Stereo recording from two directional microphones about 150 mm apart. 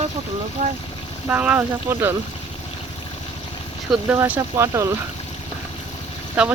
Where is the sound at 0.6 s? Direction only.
55° right (ahead or behind).